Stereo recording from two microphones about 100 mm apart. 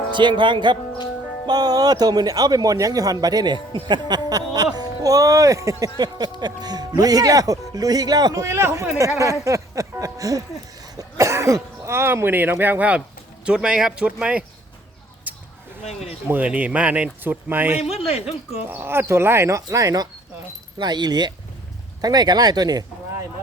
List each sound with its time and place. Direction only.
0.1 s speech: 50° right (ahead or behind); by 14.4 s 10° right (ahead or behind)
16.3 s speech: 15° right (ahead or behind)
17.8 s speech: 90° left
18.7 s speech: 20° right (ahead or behind)
20.7 s speech: 45° right (ahead or behind)